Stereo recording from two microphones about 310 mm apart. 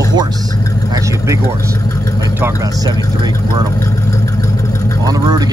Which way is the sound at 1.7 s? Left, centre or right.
Centre.